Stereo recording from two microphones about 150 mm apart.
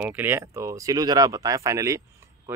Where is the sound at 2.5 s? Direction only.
15° right (ahead or behind).